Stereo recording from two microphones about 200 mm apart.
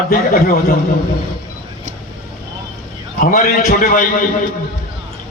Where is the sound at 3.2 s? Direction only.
45° left (ahead or behind).